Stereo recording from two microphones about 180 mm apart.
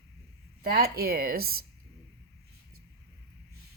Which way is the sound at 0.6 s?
60° right (ahead or behind).